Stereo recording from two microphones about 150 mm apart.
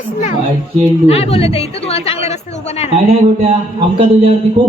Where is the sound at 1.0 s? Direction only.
40° left (ahead or behind).